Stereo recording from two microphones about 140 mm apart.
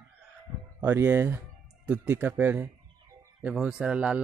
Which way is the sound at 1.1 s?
15° right (ahead or behind).